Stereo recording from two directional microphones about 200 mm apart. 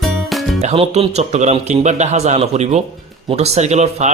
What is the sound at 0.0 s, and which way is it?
Music, centre (ahead or behind).